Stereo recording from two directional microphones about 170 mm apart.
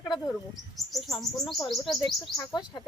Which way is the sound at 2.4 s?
25° left (ahead or behind).